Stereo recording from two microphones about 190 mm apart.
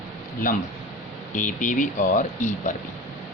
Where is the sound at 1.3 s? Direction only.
40° left (ahead or behind).